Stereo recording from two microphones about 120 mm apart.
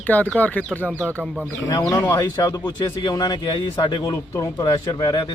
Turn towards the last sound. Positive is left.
turn(degrees=35)  # may be behind; listen again after turning